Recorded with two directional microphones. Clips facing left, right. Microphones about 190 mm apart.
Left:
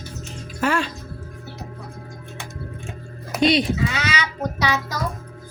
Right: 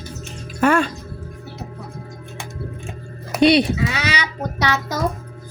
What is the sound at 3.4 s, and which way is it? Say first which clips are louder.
Speech: right 4 dB; 65° right (ahead or behind).